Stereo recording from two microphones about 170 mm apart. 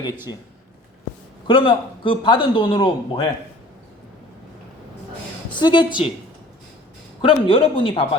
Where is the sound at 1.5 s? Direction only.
30° left (ahead or behind).